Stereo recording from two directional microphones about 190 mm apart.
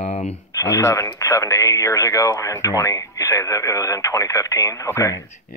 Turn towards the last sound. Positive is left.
turn(degrees=15)  # may be behind; listen again after turning